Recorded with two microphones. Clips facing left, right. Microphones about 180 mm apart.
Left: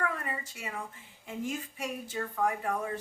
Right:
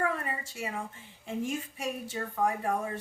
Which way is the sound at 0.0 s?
25° right (ahead or behind).